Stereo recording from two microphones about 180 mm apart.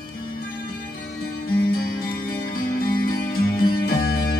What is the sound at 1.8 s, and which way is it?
Music, 55° left (ahead or behind).